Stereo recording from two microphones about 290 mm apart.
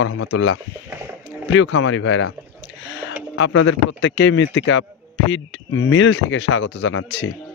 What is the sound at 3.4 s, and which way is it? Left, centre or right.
Speech, left.